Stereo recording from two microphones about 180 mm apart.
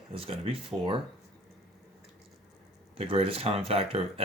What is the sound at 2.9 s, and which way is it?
Speech, 30° right (ahead or behind).